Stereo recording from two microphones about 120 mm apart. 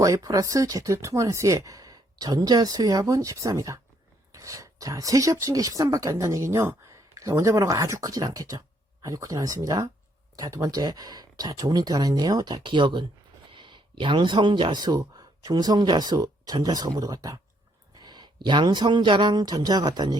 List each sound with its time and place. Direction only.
0.0 s speech: 30° right (ahead or behind)